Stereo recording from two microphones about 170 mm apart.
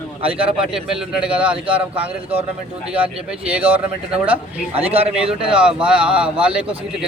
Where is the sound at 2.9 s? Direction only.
5° right (ahead or behind).